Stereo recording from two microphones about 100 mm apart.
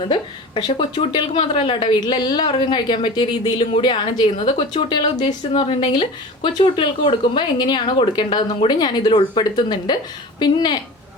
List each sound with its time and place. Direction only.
0.0 s a woman's voice: 55° left (ahead or behind)
4.4 s a woman's voice: 65° left (ahead or behind)
4.7 s speech: 50° left (ahead or behind)